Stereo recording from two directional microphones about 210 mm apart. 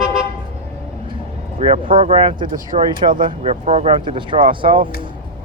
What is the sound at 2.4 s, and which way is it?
Speech, 40° right (ahead or behind).